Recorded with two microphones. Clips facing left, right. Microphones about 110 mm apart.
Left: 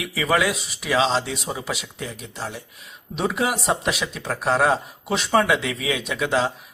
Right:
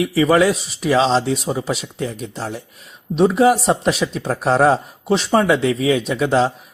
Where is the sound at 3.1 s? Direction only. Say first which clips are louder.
Right 10 dB; 30° right (ahead or behind).